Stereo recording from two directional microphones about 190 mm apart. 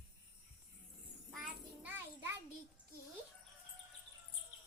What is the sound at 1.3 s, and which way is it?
Child singing, centre (ahead or behind).